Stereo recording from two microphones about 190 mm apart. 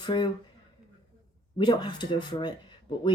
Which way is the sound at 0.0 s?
25° left (ahead or behind).